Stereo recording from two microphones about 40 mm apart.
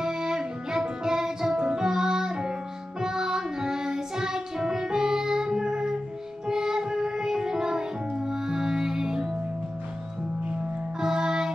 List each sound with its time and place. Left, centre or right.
0.0 s music: centre
11.0 s music: centre